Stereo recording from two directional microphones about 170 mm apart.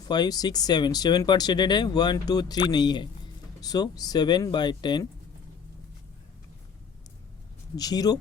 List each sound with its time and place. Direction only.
0.0 s speech: 25° left (ahead or behind)
7.8 s speech: 20° left (ahead or behind)